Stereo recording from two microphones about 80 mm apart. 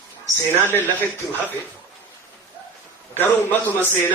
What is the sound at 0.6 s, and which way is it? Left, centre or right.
Speech, left.